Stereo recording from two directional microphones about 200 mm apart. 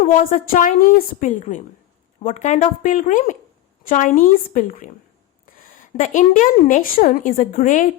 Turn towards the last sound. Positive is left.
turn(degrees=40)  # may be behind; listen again after turning